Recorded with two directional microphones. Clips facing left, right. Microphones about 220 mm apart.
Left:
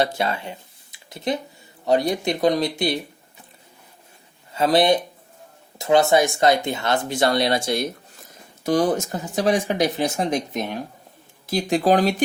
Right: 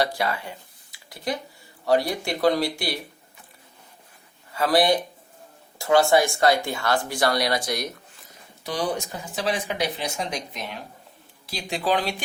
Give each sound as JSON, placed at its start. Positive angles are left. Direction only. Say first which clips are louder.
{"t": 0.0, "sound": "speech", "louder": "left 2 dB", "side_deg": 25}
{"t": 4.5, "sound": "speech", "louder": "left 3 dB", "side_deg": 25}
{"t": 8.6, "sound": "speech", "louder": "left 8 dB", "side_deg": 45}